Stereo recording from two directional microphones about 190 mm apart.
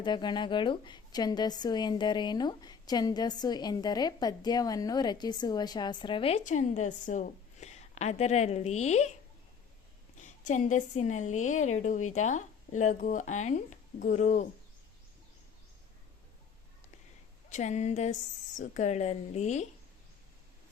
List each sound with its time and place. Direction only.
0.0 s a woman's voice: 25° left (ahead or behind)
10.2 s a woman's voice: 40° left (ahead or behind)
17.5 s a woman's voice: 35° left (ahead or behind)